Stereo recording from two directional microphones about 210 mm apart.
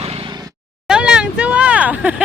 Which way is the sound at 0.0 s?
25° right (ahead or behind).